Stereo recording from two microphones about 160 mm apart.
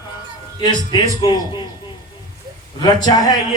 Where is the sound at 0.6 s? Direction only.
25° left (ahead or behind).